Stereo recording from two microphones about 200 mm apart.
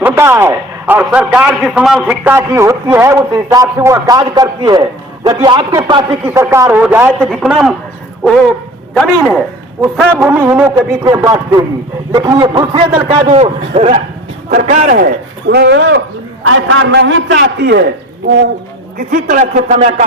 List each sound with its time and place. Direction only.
0.0 s a man's voice: 10° right (ahead or behind)
10.2 s a man's voice: 10° right (ahead or behind); by 16.0 s 60° right (ahead or behind)
16.4 s a man's voice: 90° right; by 17.8 s 60° right (ahead or behind)
18.9 s a man's voice: 40° right (ahead or behind)